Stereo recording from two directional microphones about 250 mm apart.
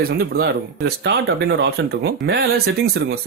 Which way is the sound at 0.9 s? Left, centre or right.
Right.